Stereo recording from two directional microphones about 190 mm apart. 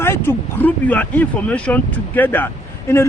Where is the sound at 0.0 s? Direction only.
10° left (ahead or behind).